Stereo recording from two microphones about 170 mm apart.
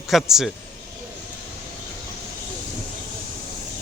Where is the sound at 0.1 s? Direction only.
Centre (ahead or behind).